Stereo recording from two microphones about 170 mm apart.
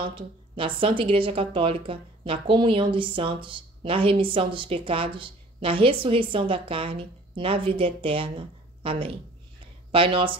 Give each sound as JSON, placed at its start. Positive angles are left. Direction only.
{"t": 0.0, "sound": "speech", "side_deg": -30}